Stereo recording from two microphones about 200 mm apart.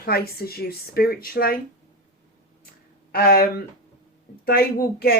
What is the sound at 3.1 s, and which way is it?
Speech, 50° left (ahead or behind).